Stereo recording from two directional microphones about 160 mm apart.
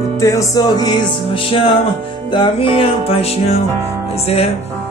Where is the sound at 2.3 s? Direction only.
35° left (ahead or behind).